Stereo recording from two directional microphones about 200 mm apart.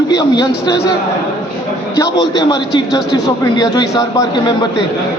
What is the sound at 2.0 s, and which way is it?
A man's voice, 20° left (ahead or behind).